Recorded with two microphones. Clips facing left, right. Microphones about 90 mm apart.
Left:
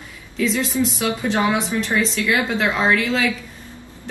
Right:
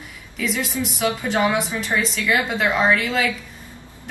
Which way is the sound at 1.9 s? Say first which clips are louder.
Even; 15° right (ahead or behind).